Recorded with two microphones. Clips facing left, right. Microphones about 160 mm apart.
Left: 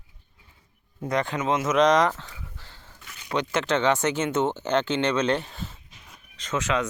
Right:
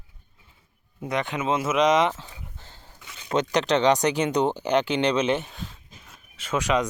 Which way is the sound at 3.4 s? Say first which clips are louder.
Right 3 dB; 15° right (ahead or behind).